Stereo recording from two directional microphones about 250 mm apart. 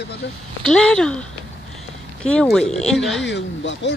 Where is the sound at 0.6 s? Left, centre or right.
Centre.